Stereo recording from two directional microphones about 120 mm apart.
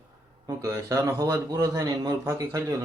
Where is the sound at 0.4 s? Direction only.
30° right (ahead or behind).